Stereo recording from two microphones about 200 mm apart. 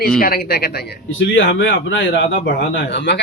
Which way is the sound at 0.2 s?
50° left (ahead or behind).